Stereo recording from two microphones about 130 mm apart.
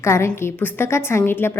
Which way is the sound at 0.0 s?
20° left (ahead or behind).